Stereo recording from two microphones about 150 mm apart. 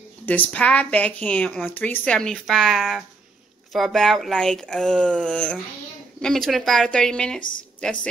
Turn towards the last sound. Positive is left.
turn(degrees=5)  # may be behind; listen again after turning